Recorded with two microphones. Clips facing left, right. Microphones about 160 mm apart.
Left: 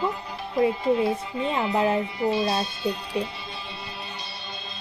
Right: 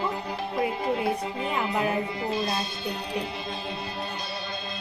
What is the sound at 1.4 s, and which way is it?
Speech, 25° left (ahead or behind).